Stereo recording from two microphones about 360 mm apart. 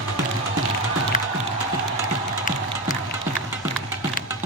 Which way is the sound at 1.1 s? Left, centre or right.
Left.